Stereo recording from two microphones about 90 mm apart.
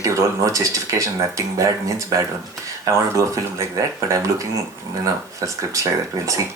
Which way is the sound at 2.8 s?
35° right (ahead or behind).